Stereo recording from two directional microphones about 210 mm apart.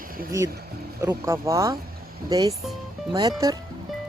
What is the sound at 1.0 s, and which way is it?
Speech, 15° right (ahead or behind).